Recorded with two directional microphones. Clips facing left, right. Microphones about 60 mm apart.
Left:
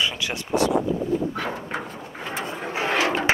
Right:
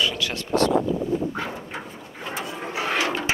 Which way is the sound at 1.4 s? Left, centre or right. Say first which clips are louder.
Left 3 dB; left.